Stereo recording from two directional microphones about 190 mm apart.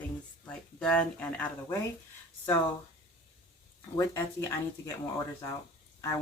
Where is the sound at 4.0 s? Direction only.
15° left (ahead or behind).